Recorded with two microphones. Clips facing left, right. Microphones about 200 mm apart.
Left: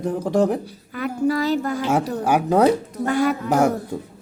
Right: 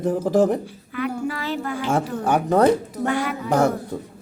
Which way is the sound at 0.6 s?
40° left (ahead or behind).